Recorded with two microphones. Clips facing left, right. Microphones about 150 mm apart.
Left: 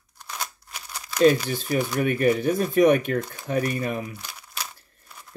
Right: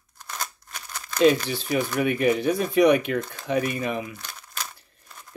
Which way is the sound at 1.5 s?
45° left (ahead or behind).